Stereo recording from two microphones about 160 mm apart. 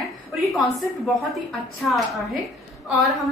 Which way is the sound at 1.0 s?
Centre (ahead or behind).